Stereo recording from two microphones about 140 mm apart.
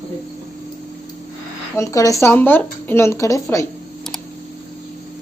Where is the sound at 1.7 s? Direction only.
20° left (ahead or behind).